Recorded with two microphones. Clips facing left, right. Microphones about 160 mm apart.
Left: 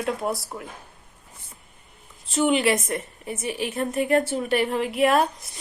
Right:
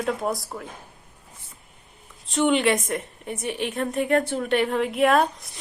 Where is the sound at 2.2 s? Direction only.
Centre (ahead or behind).